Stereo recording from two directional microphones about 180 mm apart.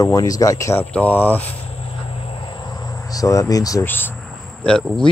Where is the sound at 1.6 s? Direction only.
30° left (ahead or behind); by 5.0 s 5° left (ahead or behind).